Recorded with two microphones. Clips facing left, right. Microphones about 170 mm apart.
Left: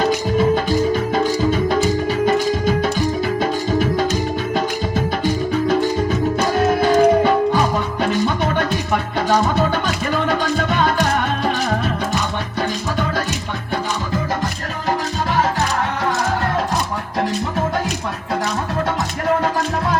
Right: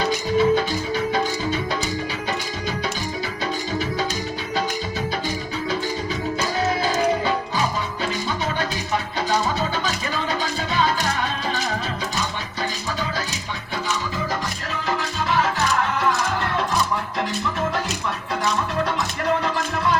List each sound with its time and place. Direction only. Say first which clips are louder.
0.0 s music: left 3 dB; 45° left (ahead or behind)
14.8 s music: left 4 dB; 40° left (ahead or behind)